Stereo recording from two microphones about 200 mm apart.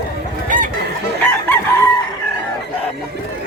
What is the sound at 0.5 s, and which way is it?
Goose, 40° right (ahead or behind).